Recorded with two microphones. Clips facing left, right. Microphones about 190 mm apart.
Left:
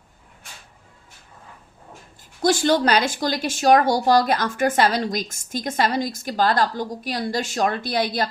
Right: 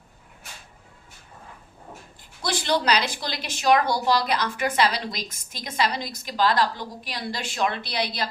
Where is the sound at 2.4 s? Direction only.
45° left (ahead or behind).